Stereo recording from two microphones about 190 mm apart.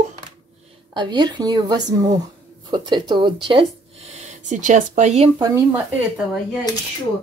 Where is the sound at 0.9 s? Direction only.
20° right (ahead or behind).